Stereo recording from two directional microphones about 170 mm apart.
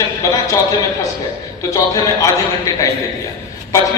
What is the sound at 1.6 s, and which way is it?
A man's voice, 20° left (ahead or behind).